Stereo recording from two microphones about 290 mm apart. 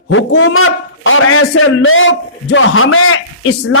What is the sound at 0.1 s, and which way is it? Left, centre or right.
A man's voice, left.